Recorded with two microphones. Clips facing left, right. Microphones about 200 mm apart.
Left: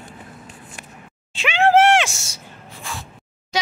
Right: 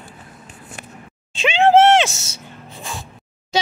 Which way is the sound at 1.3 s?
25° right (ahead or behind).